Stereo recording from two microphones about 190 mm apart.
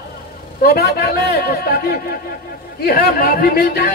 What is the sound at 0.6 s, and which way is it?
Speech, 55° left (ahead or behind).